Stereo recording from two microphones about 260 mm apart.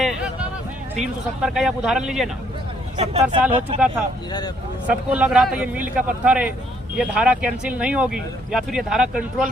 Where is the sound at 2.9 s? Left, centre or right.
Right.